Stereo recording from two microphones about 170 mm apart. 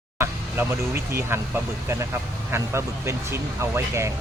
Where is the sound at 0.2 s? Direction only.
15° right (ahead or behind).